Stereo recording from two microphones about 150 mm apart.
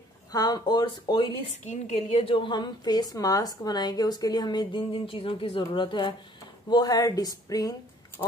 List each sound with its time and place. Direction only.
0.3 s a woman's voice: 25° left (ahead or behind)
1.7 s a woman's voice: 45° left (ahead or behind); by 7.7 s 25° left (ahead or behind)